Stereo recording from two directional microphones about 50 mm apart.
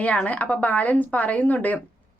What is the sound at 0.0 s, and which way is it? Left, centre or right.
A woman's voice, left.